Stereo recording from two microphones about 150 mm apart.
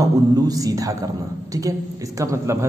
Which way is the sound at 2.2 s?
20° right (ahead or behind).